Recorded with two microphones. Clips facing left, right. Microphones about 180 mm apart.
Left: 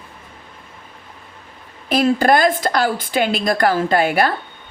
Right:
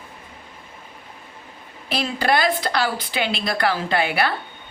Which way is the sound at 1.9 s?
45° left (ahead or behind).